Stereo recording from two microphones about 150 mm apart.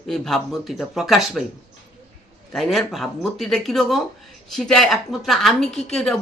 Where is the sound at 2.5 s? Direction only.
Centre (ahead or behind).